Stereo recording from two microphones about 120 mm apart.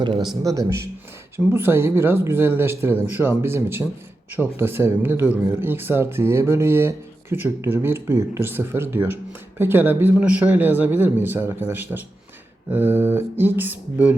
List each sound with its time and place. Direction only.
0.4 s a man's voice: 30° right (ahead or behind)